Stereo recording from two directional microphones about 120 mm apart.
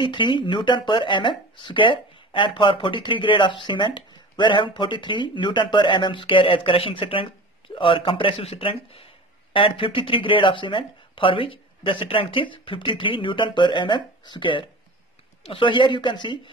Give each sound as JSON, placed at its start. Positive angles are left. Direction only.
{"t": 0.0, "sound": "speech", "side_deg": 45}